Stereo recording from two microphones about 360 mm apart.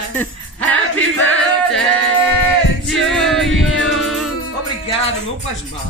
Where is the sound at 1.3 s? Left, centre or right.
Centre.